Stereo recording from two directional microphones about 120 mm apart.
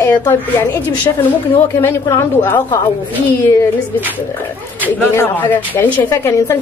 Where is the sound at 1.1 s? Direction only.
35° left (ahead or behind).